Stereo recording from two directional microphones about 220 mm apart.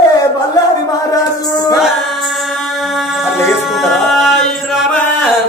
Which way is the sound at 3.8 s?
Centre (ahead or behind).